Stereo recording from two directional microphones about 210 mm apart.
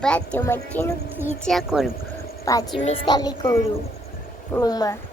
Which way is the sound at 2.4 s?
15° left (ahead or behind).